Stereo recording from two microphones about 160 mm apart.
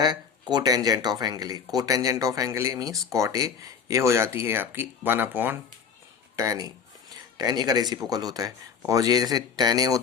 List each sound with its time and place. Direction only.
0.0 s speech: 25° right (ahead or behind); by 5.5 s 10° right (ahead or behind)
6.3 s a sound: 20° right (ahead or behind)
8.1 s speech: 25° right (ahead or behind)